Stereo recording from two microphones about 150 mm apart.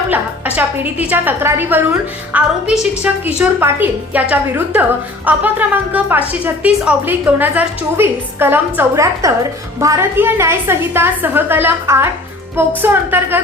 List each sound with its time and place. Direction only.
0.1 s a woman's voice: 10° right (ahead or behind)